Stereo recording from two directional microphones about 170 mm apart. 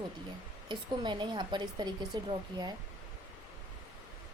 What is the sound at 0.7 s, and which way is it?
Speech, 25° right (ahead or behind).